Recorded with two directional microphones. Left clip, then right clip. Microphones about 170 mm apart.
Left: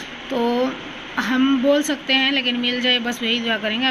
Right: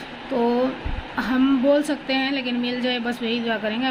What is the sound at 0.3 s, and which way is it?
A woman's voice, centre (ahead or behind).